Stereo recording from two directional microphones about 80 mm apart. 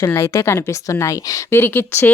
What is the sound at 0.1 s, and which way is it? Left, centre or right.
A woman's voice, left.